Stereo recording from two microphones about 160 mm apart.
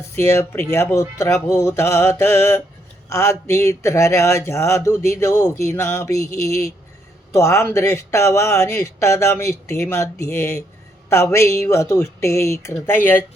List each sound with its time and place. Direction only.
0.2 s speech: 15° left (ahead or behind)
7.3 s speech: 15° left (ahead or behind)